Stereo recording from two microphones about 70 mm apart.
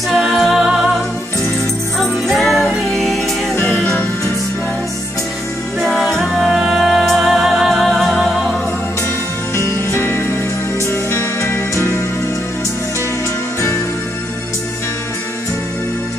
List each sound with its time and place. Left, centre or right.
0.1 s music: centre
2.0 s jingle bell: centre
3.5 s music: left
5.8 s music: centre
9.6 s music: left